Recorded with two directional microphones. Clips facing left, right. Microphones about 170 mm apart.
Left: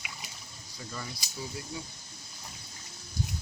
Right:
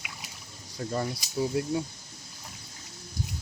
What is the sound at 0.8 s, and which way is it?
Speech, 50° right (ahead or behind).